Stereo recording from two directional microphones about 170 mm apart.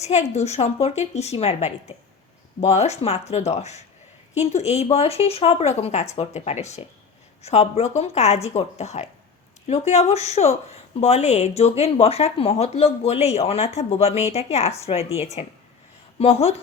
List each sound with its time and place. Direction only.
0.0 s speech: 40° left (ahead or behind)